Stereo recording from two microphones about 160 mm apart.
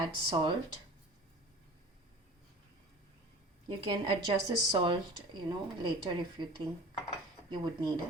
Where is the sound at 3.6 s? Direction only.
30° right (ahead or behind).